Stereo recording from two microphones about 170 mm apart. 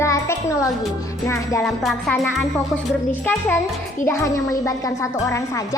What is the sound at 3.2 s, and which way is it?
Speech, 10° left (ahead or behind).